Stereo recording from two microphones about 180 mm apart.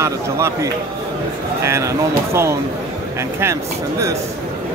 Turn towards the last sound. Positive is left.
turn(degrees=-15)  # may be behind; listen again after turning